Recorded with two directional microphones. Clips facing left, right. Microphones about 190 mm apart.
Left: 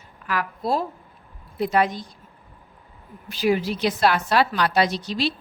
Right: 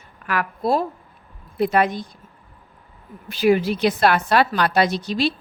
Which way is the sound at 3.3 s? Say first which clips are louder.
Right 4 dB; 60° right (ahead or behind).